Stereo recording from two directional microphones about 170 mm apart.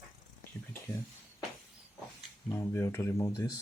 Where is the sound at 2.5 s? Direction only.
15° left (ahead or behind).